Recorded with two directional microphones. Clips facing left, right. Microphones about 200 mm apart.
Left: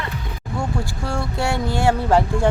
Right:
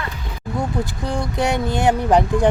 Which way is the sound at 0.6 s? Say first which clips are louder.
Right 2 dB; 20° right (ahead or behind).